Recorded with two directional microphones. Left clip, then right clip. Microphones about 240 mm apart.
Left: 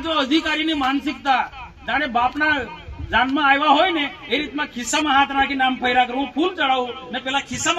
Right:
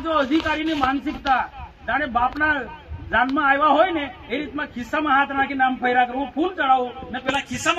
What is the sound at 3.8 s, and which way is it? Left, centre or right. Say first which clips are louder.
Speech: left 2 dB; left.